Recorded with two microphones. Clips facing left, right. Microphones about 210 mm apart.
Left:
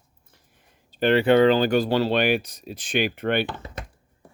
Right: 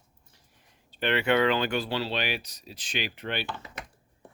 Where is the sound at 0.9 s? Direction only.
40° left (ahead or behind).